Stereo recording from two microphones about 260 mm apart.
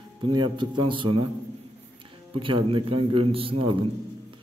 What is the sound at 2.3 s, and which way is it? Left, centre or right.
A man's voice, centre.